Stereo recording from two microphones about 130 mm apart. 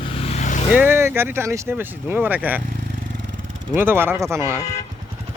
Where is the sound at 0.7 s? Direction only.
15° right (ahead or behind).